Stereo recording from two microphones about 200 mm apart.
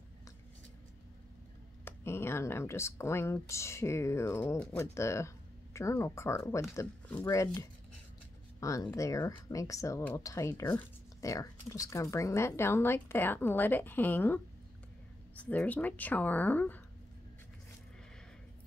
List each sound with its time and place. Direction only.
1.9 s speech: 10° left (ahead or behind)